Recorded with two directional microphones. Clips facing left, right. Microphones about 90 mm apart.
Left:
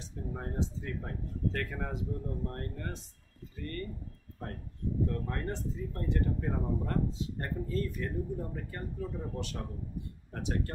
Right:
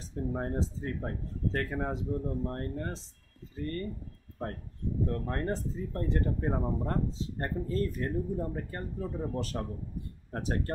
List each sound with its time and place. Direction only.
0.0 s speech: 40° right (ahead or behind)
5.0 s speech: 40° right (ahead or behind)